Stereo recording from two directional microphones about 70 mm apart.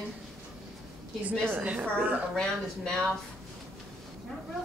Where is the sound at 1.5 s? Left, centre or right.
Centre.